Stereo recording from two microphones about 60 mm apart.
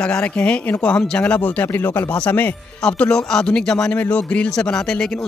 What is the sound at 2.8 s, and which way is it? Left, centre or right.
Speech, centre.